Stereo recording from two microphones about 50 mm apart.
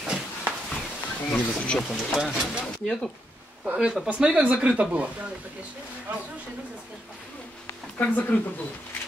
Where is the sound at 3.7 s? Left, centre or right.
Centre.